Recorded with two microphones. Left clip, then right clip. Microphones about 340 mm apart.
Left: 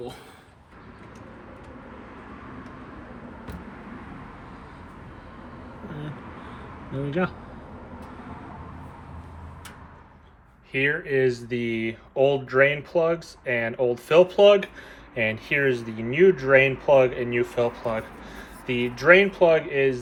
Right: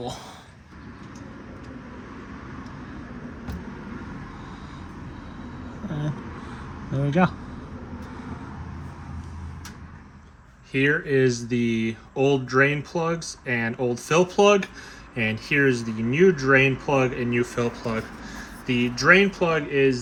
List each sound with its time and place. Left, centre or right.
7.1 s speech: centre
10.7 s speech: centre